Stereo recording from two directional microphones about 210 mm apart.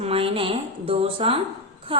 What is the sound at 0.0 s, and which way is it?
A woman's voice, 25° right (ahead or behind).